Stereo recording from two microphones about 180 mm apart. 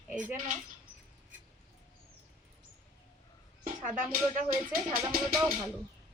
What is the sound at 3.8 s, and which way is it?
Speech, 10° right (ahead or behind).